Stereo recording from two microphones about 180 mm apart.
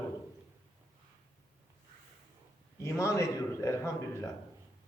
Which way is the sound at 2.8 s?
15° left (ahead or behind).